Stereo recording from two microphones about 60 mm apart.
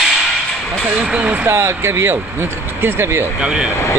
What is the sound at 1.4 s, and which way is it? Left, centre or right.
Speech, right.